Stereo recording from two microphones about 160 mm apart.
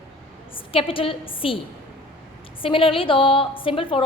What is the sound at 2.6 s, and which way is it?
A woman's voice, 35° left (ahead or behind).